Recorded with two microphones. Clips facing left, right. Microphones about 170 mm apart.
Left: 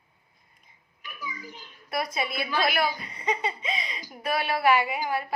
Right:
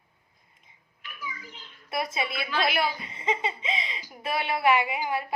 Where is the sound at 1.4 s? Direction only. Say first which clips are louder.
Left 4 dB; 15° left (ahead or behind).